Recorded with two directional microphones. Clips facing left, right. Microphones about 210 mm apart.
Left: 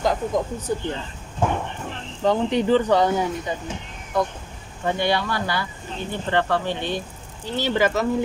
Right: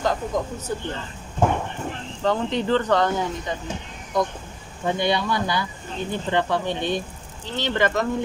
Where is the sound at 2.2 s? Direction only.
10° left (ahead or behind).